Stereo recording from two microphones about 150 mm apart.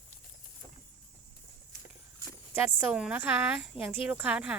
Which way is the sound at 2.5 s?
15° right (ahead or behind).